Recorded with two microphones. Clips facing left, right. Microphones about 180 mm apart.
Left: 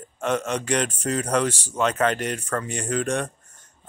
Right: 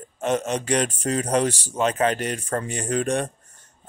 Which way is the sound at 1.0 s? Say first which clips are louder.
Right 1 dB; 20° right (ahead or behind).